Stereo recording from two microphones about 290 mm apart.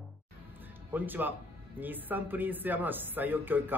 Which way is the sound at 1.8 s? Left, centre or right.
Centre.